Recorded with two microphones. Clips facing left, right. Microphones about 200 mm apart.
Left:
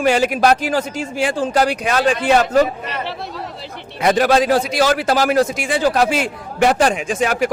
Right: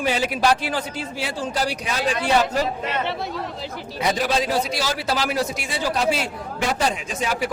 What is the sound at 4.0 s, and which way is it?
A man's voice, 70° left (ahead or behind).